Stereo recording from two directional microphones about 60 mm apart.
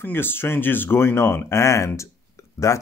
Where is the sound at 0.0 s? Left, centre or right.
Left.